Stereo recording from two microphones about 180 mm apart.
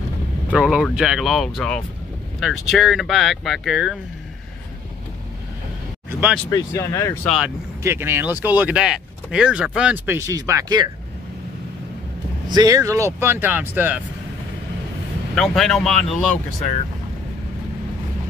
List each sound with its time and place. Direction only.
0.5 s speech: 5° right (ahead or behind)
6.5 s speech: 15° left (ahead or behind)
7.2 s speech: centre (ahead or behind)
7.8 s speech: 15° right (ahead or behind)
12.4 s speech: 20° right (ahead or behind)
15.3 s speech: centre (ahead or behind)